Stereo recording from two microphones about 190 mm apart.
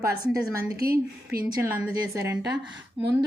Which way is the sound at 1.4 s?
10° right (ahead or behind).